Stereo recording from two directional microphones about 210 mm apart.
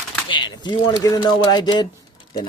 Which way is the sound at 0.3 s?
20° left (ahead or behind).